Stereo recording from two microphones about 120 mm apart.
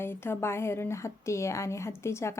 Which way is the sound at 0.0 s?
20° left (ahead or behind).